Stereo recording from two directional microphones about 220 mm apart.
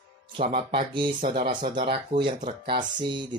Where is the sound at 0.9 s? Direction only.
20° right (ahead or behind).